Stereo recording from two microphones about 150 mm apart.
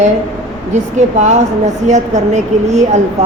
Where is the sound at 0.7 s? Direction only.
50° right (ahead or behind).